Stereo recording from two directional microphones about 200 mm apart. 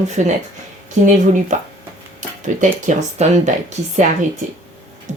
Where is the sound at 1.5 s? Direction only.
40° right (ahead or behind).